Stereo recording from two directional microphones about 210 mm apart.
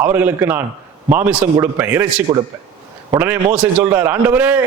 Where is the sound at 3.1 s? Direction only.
10° right (ahead or behind).